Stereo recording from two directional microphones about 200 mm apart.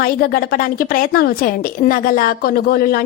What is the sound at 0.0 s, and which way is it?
A woman's voice, 50° left (ahead or behind).